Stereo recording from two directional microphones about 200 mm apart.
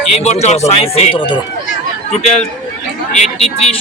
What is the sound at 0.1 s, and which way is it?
Speech, 35° left (ahead or behind).